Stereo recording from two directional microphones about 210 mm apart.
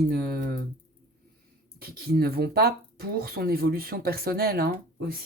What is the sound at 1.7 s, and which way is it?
Speech, 45° right (ahead or behind).